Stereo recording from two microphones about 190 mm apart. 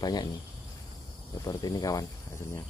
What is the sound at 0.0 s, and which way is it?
Speech, 20° left (ahead or behind).